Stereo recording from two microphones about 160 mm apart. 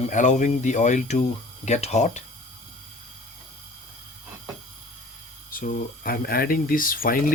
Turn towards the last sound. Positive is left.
turn(degrees=60)  # may be behind; listen again after turning